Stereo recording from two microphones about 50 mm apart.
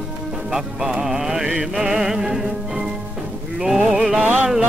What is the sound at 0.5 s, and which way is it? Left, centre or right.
Music, centre.